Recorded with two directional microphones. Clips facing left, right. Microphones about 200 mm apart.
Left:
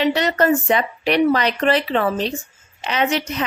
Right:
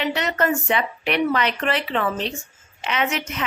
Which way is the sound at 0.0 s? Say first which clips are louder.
Left 5 dB; 35° left (ahead or behind).